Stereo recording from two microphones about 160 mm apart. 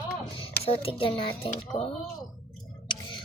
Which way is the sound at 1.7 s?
25° left (ahead or behind).